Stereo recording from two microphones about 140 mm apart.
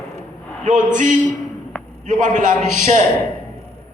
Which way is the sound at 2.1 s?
60° right (ahead or behind).